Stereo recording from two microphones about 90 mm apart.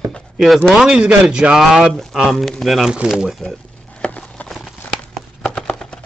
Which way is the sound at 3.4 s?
10° left (ahead or behind).